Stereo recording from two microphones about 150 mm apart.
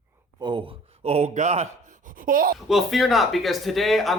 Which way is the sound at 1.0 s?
45° right (ahead or behind).